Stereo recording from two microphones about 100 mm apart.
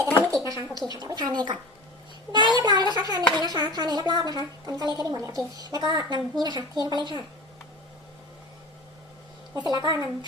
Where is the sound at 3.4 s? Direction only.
45° right (ahead or behind).